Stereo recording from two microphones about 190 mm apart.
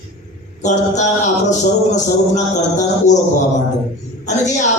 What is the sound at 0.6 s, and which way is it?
Speech, 40° left (ahead or behind).